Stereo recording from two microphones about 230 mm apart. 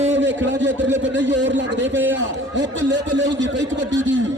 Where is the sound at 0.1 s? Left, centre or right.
Right.